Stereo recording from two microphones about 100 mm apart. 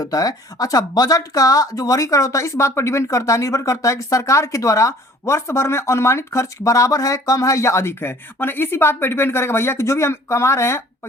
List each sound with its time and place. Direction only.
0.0 s speech: 40° left (ahead or behind)